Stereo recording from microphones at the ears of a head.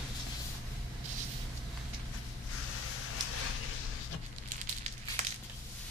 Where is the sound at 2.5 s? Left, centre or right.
Left.